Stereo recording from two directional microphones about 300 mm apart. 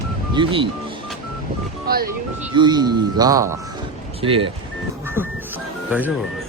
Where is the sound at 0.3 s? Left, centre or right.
Centre.